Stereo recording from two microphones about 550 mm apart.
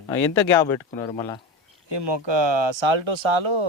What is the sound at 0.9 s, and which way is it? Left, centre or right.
Speech, centre.